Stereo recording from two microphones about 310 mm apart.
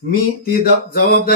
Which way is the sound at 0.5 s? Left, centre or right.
Left.